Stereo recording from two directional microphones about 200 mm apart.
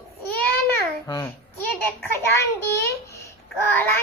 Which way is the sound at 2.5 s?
15° left (ahead or behind).